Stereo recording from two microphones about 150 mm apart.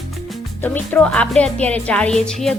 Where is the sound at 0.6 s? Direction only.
10° left (ahead or behind).